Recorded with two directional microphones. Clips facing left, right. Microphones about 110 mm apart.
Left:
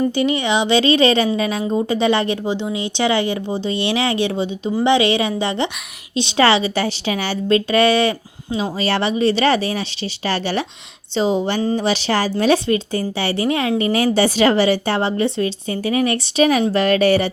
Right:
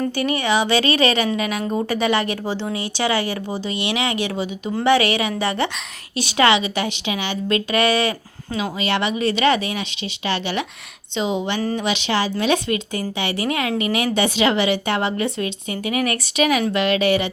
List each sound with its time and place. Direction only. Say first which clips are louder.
0.0 s speech: left 4 dB; 25° left (ahead or behind)
2.5 s a woman's voice: left 3 dB; 15° left (ahead or behind); by 11.6 s 40° left (ahead or behind)
11.6 s speech: left 4 dB; 25° left (ahead or behind)
11.9 s a woman's voice: left 3 dB; 35° left (ahead or behind)